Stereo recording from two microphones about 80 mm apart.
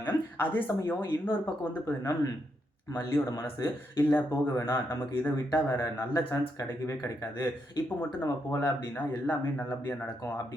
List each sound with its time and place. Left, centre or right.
0.0 s a sound: left
0.9 s speech: left
8.6 s speech: left